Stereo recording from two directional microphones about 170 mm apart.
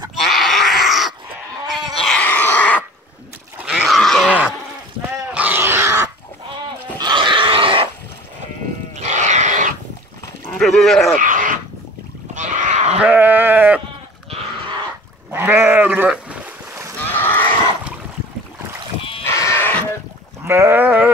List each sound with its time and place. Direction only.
0.2 s a sound: centre (ahead or behind)
3.5 s a sound: 5° right (ahead or behind)
7.0 s wild animals: 25° right (ahead or behind)
9.0 s wild animals: 45° right (ahead or behind)
10.4 s speech: 5° left (ahead or behind)
11.1 s a sound: 50° right (ahead or behind)
12.4 s livestock: 45° right (ahead or behind)
13.0 s goat: 10° right (ahead or behind)
14.3 s a sound: 30° right (ahead or behind)
15.3 s bleat: 15° right (ahead or behind)
17.1 s livestock: 10° left (ahead or behind)
19.2 s sheep: 15° left (ahead or behind)
20.4 s livestock: 15° right (ahead or behind)